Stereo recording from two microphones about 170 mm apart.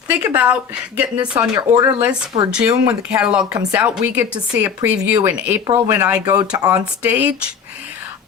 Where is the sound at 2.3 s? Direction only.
35° right (ahead or behind).